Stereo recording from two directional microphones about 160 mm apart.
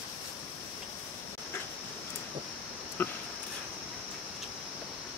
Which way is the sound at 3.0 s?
10° left (ahead or behind).